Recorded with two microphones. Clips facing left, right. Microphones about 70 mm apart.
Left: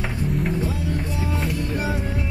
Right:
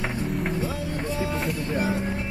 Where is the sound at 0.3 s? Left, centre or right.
Centre.